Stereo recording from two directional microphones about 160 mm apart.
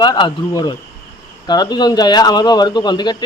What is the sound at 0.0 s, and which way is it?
Speech, 30° left (ahead or behind).